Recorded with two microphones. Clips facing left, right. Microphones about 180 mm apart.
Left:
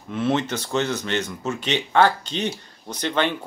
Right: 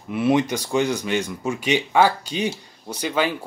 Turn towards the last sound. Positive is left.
turn(degrees=-5)  # may be behind; listen again after turning